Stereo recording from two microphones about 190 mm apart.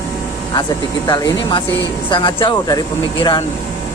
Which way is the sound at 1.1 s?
25° left (ahead or behind).